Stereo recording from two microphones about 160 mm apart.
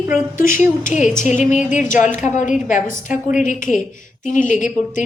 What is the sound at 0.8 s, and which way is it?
A woman's voice, 50° left (ahead or behind).